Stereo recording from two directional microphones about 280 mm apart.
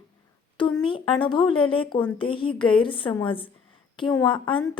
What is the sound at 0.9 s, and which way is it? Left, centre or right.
A woman's voice, centre.